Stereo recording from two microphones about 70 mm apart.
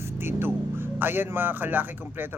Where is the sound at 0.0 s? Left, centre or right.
Right.